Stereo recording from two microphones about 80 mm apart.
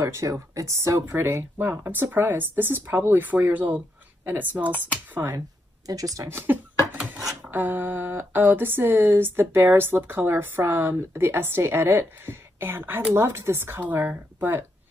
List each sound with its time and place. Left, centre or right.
0.0 s speech: right
5.9 s speech: right
6.3 s speech: right